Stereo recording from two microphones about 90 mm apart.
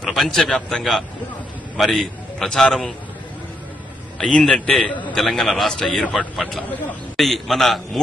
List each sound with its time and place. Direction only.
0.0 s a man's voice: 5° left (ahead or behind)
4.2 s a man's voice: 5° left (ahead or behind)